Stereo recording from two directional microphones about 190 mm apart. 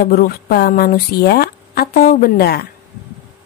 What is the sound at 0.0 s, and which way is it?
Speech, 50° left (ahead or behind).